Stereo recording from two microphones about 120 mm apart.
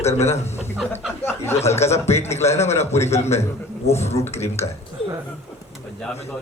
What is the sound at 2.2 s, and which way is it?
Speech, 65° left (ahead or behind).